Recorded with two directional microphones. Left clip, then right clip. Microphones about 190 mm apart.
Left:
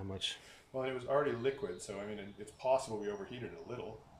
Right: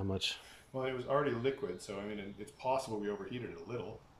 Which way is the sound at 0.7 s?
Centre (ahead or behind).